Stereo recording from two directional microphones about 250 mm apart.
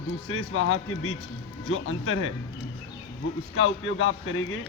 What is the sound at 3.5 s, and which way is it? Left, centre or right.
Speech, left.